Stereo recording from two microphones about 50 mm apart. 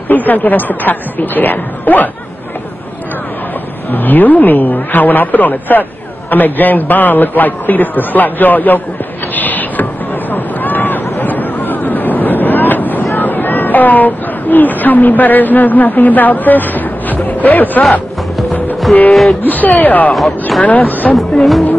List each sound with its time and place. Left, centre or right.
0.1 s a man's voice: left
3.9 s a man's voice: left
9.3 s a sound: left
10.3 s vehicle: left
19.4 s a man's voice: left
21.1 s music: centre